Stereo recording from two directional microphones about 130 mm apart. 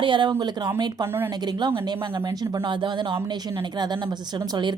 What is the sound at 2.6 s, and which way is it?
Speech, 40° right (ahead or behind).